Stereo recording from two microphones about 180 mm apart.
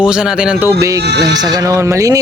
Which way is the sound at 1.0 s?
65° right (ahead or behind).